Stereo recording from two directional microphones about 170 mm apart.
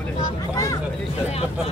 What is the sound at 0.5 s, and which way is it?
Speech, 20° left (ahead or behind).